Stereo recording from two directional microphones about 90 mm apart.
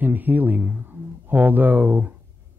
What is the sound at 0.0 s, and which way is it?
Speech, 20° right (ahead or behind).